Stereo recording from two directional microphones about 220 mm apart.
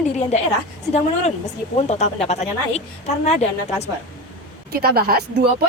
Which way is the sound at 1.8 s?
30° left (ahead or behind).